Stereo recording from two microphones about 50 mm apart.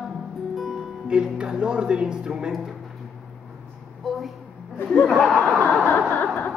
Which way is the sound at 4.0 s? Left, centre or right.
Centre.